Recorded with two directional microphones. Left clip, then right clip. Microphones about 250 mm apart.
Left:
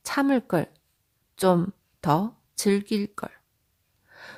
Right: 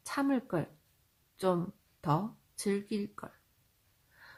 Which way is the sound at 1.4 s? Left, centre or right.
Left.